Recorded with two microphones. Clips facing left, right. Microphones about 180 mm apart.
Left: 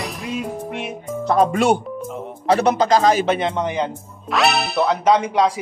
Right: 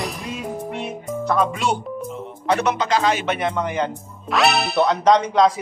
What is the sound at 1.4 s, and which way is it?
Speech, 55° left (ahead or behind).